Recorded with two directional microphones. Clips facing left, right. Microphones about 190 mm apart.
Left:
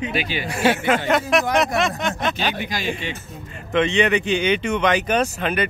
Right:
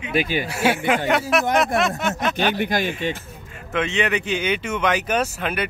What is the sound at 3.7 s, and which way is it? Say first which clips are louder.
Speech: left 4 dB; 5° right (ahead or behind).